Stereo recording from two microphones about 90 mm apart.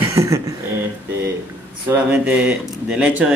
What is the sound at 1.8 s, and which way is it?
Speech, 25° right (ahead or behind).